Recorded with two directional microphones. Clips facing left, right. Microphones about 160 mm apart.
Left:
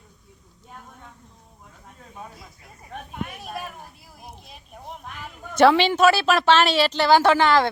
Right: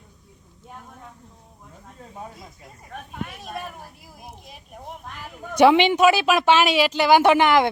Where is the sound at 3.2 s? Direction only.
5° left (ahead or behind).